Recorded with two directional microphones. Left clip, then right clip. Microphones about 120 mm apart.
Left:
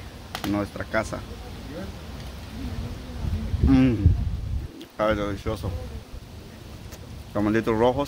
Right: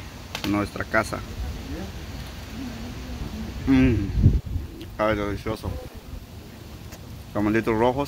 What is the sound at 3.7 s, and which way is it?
Speech, 40° left (ahead or behind).